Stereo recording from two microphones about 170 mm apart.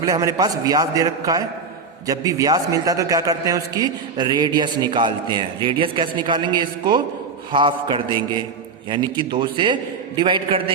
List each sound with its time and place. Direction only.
0.0 s a man's voice: 20° right (ahead or behind)